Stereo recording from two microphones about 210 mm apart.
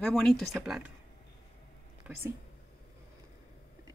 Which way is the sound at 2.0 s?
10° right (ahead or behind).